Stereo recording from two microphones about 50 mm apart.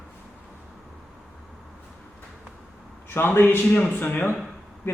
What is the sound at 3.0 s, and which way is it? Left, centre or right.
A man's voice, left.